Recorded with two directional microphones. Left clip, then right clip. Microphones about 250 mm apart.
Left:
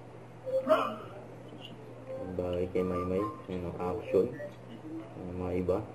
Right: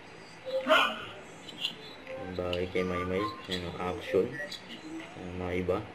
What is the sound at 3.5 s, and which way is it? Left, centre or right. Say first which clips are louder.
Speech: right 1 dB; right.